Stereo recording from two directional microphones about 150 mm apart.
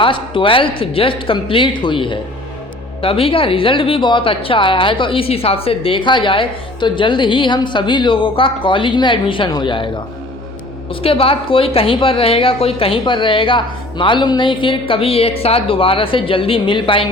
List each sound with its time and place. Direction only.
0.0 s speech: 35° left (ahead or behind)
11.0 s speech: 40° left (ahead or behind)